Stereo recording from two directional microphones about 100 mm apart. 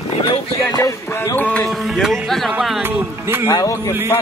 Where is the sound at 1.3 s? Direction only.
10° left (ahead or behind).